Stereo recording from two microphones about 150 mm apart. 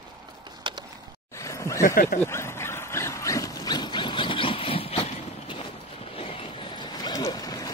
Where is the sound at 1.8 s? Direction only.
70° left (ahead or behind).